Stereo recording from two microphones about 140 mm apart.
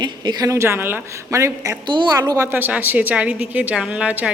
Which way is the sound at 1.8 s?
30° right (ahead or behind).